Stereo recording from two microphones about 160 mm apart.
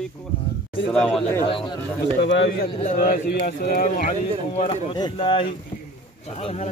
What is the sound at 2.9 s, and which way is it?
A man's voice, 55° left (ahead or behind).